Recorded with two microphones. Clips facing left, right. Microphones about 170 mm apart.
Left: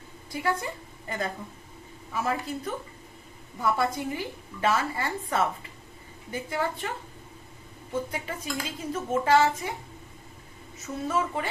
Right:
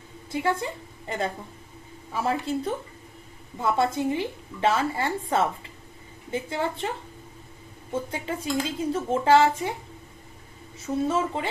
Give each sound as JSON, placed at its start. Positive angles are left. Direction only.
{"t": 0.3, "sound": "a woman's voice", "side_deg": -25}
{"t": 8.1, "sound": "a woman's voice", "side_deg": -30}
{"t": 10.8, "sound": "a woman's voice", "side_deg": -30}